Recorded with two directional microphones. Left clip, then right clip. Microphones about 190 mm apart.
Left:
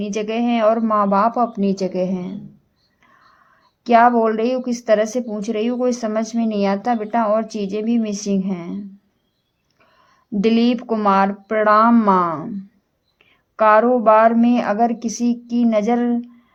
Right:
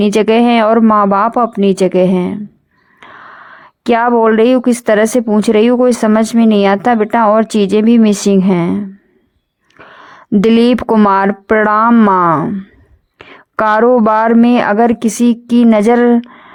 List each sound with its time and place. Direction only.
0.0 s speech: 50° right (ahead or behind)
13.1 s speech: 50° right (ahead or behind)